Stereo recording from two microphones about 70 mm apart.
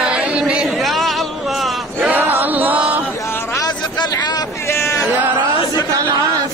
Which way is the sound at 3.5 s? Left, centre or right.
Left.